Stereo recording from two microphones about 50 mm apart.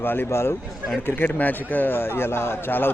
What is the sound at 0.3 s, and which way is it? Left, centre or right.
Speech, left.